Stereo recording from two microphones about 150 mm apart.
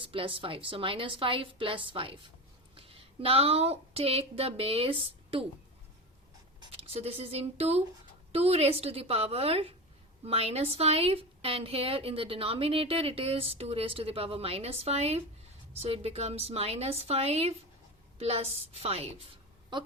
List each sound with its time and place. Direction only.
0.0 s a woman's voice: 35° right (ahead or behind)
6.7 s a woman's voice: 40° right (ahead or behind)